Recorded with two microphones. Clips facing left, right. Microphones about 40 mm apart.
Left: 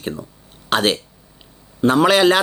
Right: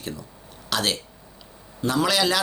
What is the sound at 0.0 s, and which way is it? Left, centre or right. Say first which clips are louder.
Speech: left 7 dB; left.